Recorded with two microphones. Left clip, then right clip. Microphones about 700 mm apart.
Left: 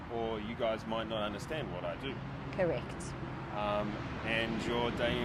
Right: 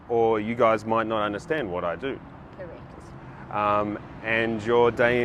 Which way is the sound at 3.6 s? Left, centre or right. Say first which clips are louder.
Right 11 dB; right.